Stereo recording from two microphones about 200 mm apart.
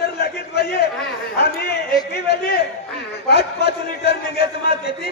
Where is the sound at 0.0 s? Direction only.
55° left (ahead or behind).